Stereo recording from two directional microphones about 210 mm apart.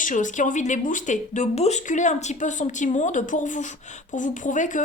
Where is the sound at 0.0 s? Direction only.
35° left (ahead or behind).